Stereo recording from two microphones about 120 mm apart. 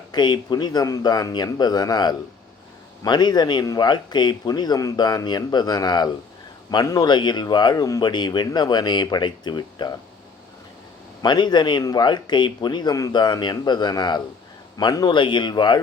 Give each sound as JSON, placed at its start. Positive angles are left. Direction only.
{"t": 0.1, "sound": "speech", "side_deg": 35}
{"t": 11.2, "sound": "speech", "side_deg": 35}